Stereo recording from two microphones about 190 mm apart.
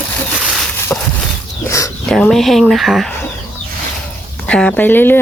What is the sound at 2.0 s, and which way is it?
Speech, centre (ahead or behind).